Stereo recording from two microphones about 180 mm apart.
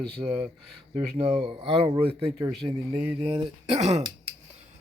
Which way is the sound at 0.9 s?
35° right (ahead or behind).